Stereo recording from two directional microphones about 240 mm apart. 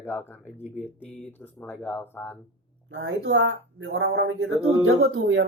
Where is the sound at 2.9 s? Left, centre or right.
Right.